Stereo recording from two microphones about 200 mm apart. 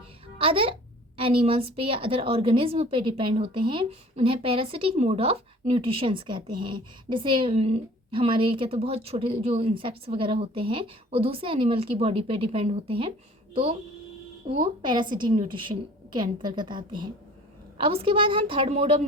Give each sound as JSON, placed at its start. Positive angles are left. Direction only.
{"t": 0.3, "sound": "a child's voice", "side_deg": -25}